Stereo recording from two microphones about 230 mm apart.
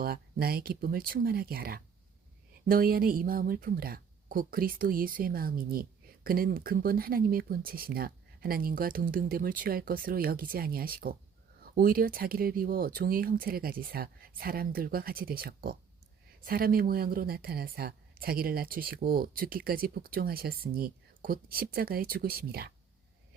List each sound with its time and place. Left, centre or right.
0.0 s speech: right